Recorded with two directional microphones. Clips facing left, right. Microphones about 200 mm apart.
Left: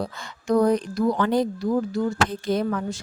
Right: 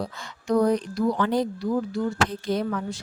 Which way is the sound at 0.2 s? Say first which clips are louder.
Left 2 dB; 50° left (ahead or behind).